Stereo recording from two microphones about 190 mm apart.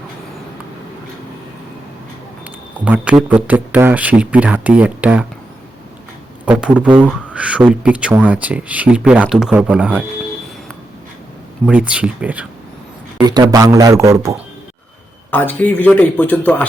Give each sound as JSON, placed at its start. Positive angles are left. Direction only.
{"t": 2.8, "sound": "speech", "side_deg": -5}
{"t": 6.4, "sound": "speech", "side_deg": -5}
{"t": 11.6, "sound": "speech", "side_deg": -5}
{"t": 13.2, "sound": "speech", "side_deg": -20}
{"t": 15.3, "sound": "a man's voice", "side_deg": 10}